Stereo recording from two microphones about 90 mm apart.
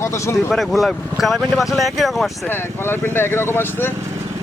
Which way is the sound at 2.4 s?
25° left (ahead or behind).